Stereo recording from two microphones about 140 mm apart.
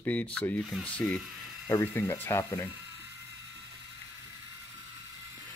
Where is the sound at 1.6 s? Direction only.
20° left (ahead or behind).